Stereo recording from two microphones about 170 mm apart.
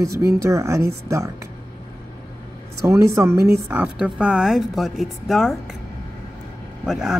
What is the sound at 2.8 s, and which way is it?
Speech, 15° right (ahead or behind).